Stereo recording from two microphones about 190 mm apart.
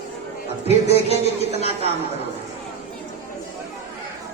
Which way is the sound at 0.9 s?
35° left (ahead or behind).